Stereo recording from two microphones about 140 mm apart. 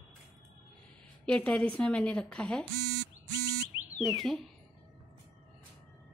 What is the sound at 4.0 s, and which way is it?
Speech, centre (ahead or behind).